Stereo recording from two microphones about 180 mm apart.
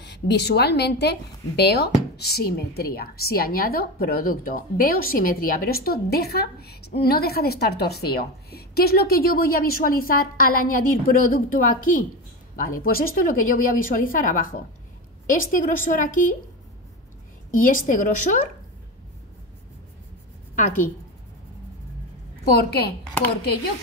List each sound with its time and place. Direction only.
0.0 s a woman's voice: 70° left (ahead or behind); by 16.3 s 50° left (ahead or behind)
17.5 s speech: 50° left (ahead or behind)
20.5 s speech: 45° left (ahead or behind)
22.5 s speech: 60° left (ahead or behind)